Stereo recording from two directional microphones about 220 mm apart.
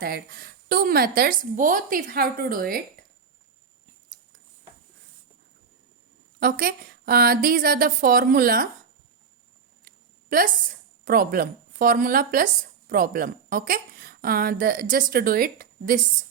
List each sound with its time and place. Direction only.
0.0 s speech: 45° right (ahead or behind)
6.4 s a woman's voice: 40° right (ahead or behind)
9.8 s a sound: 40° right (ahead or behind)
11.0 s a woman's voice: 40° right (ahead or behind)